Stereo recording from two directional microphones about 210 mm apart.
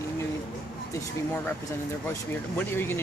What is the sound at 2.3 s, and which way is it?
Speech, 10° left (ahead or behind).